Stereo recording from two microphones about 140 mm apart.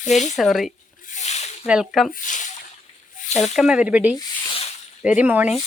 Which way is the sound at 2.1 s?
65° left (ahead or behind).